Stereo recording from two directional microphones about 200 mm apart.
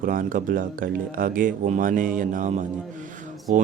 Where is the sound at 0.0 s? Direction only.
45° right (ahead or behind).